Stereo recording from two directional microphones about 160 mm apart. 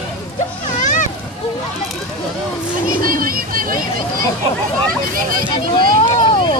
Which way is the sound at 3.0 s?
60° right (ahead or behind).